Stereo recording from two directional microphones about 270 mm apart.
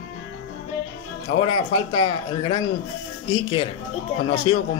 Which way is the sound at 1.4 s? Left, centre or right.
Centre.